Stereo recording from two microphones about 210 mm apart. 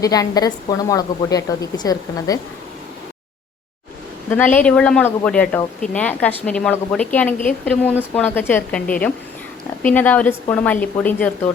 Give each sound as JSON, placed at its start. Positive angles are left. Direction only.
{"t": 0.0, "sound": "speech", "side_deg": 15}
{"t": 4.3, "sound": "speech", "side_deg": 10}